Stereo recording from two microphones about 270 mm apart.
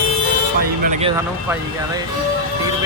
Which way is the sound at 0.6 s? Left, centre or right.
Right.